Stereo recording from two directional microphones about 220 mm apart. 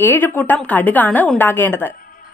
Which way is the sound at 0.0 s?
10° left (ahead or behind).